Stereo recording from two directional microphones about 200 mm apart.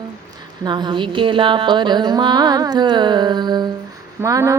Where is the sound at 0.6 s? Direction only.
20° right (ahead or behind).